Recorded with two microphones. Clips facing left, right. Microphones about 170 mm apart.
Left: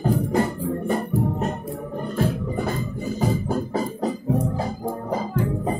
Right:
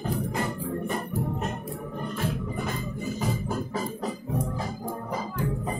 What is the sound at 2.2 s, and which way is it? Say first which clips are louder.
Music: left 8 dB; 35° left (ahead or behind).